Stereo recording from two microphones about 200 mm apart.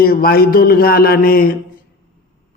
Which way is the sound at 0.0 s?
50° left (ahead or behind).